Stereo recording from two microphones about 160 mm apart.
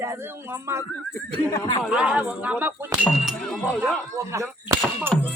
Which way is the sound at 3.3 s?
5° left (ahead or behind).